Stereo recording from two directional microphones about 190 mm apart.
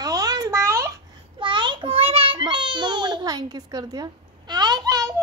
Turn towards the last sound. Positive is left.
turn(degrees=-20)  # may be behind; listen again after turning